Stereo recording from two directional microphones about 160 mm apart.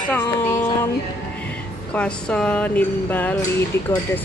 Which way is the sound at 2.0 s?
5° left (ahead or behind).